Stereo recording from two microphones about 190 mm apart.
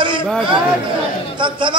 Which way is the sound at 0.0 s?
25° right (ahead or behind).